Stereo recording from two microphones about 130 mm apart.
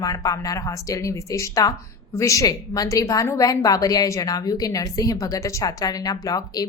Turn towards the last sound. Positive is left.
turn(degrees=30)  # may be behind; listen again after turning